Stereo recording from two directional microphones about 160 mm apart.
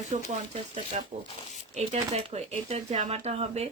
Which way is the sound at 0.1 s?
45° right (ahead or behind).